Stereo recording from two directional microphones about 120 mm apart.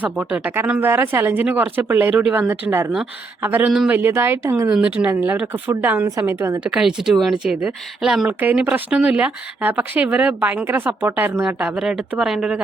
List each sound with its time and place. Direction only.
0.0 s speech: 10° right (ahead or behind)
4.7 s speech: 10° right (ahead or behind)
6.7 s speech: 5° right (ahead or behind)